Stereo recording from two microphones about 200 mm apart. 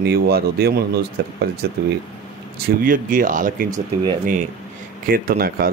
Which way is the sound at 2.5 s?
45° right (ahead or behind).